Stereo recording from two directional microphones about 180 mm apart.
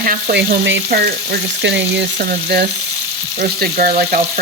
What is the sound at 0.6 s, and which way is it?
Frying, 70° right (ahead or behind).